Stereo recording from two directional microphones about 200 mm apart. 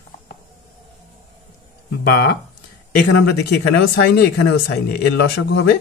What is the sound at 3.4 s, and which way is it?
Speech, 55° left (ahead or behind).